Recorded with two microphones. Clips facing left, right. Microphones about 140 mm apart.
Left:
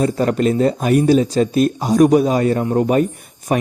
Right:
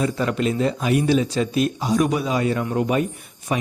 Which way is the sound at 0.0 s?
45° left (ahead or behind).